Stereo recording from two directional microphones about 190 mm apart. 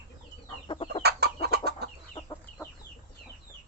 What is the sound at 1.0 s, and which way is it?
Chicken, 55° right (ahead or behind).